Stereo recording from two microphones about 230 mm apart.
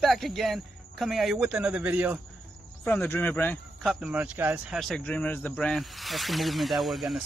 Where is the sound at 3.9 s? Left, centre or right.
Centre.